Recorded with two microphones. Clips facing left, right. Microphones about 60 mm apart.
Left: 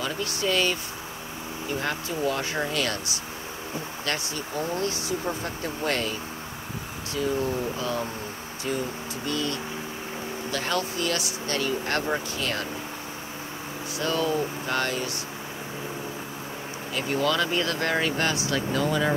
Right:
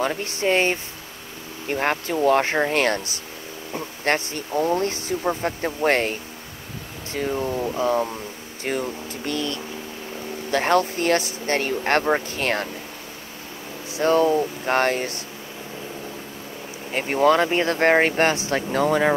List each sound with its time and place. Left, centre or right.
0.2 s speech: right
1.7 s speech: right
2.8 s speech: right
7.2 s speech: right
7.8 s speech: right
8.6 s speech: right
13.9 s speech: right
16.9 s speech: right